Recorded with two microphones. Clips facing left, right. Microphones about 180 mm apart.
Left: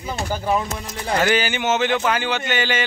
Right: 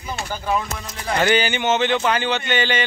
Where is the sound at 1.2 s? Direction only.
5° left (ahead or behind).